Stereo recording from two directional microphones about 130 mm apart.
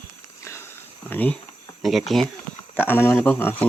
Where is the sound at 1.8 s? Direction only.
Centre (ahead or behind).